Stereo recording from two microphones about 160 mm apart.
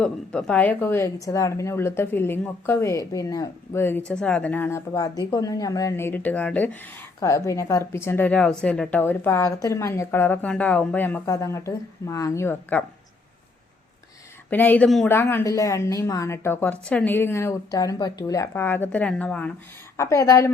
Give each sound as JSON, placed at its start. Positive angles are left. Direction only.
{"t": 0.0, "sound": "speech", "side_deg": 5}
{"t": 7.2, "sound": "speech", "side_deg": 20}
{"t": 14.5, "sound": "speech", "side_deg": 10}